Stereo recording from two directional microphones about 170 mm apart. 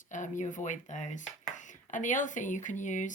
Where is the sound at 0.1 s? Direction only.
45° left (ahead or behind).